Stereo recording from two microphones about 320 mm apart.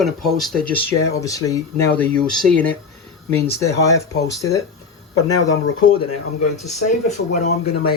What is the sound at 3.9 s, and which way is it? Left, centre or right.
Speech, centre.